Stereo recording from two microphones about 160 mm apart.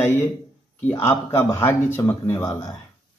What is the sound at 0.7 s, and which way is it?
A man's voice, 15° left (ahead or behind).